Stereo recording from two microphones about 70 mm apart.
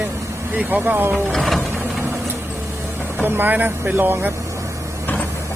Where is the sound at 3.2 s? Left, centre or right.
Right.